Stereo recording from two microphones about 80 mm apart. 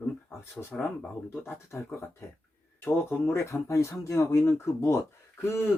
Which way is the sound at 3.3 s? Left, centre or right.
Left.